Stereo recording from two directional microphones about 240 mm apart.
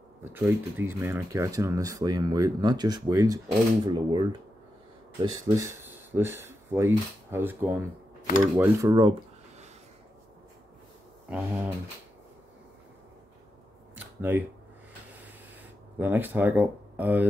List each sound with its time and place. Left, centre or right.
0.2 s speech: centre
11.2 s speech: centre
13.9 s a sound: centre
16.0 s speech: centre